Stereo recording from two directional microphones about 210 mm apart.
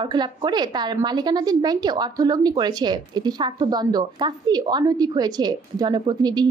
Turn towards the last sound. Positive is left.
turn(degrees=-20)  # may be behind; listen again after turning